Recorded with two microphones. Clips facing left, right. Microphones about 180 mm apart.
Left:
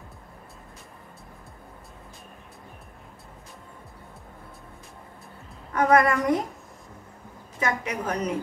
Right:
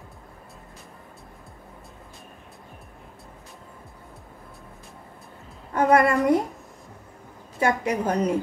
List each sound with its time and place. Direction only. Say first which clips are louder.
5.7 s a woman's voice: right 1 dB; 30° right (ahead or behind)
7.6 s a woman's voice: right 5 dB; 30° right (ahead or behind)